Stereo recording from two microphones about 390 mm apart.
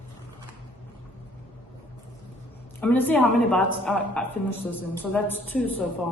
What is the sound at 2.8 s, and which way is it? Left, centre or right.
A woman's voice, centre.